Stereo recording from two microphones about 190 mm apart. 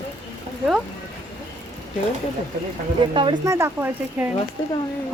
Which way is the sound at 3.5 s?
10° right (ahead or behind).